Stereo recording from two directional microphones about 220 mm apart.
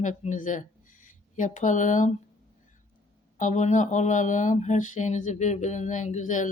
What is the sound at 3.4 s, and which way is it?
Speech, 35° left (ahead or behind).